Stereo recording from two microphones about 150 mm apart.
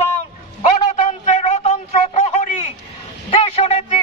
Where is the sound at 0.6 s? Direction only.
45° left (ahead or behind).